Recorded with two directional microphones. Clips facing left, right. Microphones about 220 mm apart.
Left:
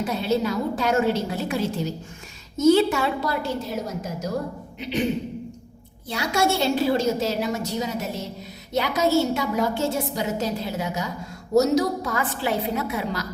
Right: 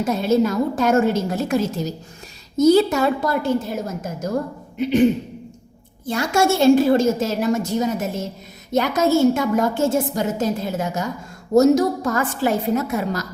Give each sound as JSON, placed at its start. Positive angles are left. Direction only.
{"t": 0.0, "sound": "a woman's voice", "side_deg": -45}
{"t": 6.1, "sound": "a woman's voice", "side_deg": -50}